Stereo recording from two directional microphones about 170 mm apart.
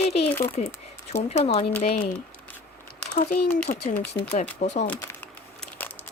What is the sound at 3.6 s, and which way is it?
Speech, 65° left (ahead or behind).